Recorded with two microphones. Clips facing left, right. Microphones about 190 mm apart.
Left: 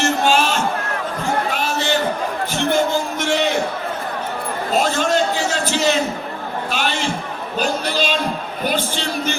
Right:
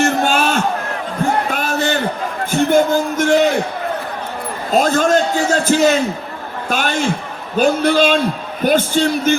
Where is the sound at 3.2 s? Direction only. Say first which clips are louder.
Right 7 dB; 45° right (ahead or behind).